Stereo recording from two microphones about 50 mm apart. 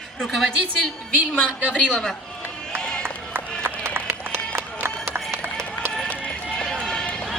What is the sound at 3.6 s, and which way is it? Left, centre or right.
Run, right.